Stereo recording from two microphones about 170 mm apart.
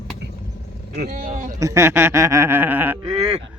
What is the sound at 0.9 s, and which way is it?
Speech, 60° right (ahead or behind).